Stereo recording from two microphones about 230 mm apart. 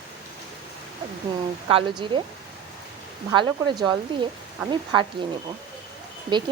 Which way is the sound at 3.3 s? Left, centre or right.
Centre.